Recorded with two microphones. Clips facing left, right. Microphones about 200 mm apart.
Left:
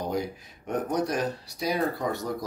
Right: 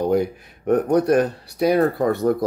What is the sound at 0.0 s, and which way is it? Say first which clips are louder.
Speech: right 10 dB; 60° right (ahead or behind).